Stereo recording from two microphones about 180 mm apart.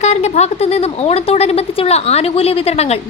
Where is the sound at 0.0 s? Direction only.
40° left (ahead or behind).